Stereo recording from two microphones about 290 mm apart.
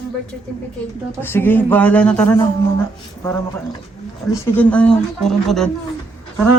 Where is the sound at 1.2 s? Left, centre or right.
Centre.